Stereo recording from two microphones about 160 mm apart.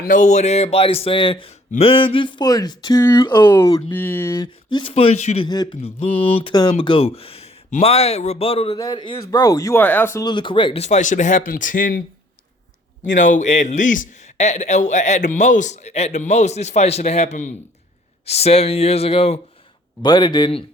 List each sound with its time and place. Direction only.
0.0 s a man's voice: 55° left (ahead or behind); by 10.2 s 15° left (ahead or behind)
10.2 s a man's voice: 30° left (ahead or behind)
10.8 s a man's voice: 50° left (ahead or behind)
13.1 s a man's voice: 55° left (ahead or behind); by 20.7 s 30° left (ahead or behind)